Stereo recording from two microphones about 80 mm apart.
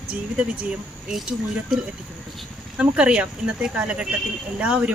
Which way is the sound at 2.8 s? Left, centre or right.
Centre.